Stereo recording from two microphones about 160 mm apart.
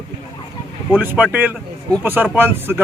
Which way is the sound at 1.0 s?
10° right (ahead or behind).